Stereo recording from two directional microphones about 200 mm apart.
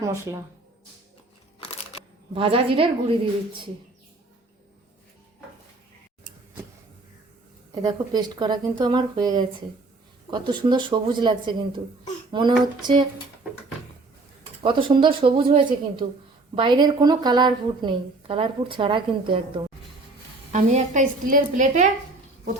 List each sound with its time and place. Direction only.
0.0 s speech: 15° right (ahead or behind)
2.3 s a woman's voice: 25° right (ahead or behind)
7.8 s a woman's voice: 20° right (ahead or behind)
14.6 s a woman's voice: 25° right (ahead or behind)
20.5 s a woman's voice: 35° right (ahead or behind)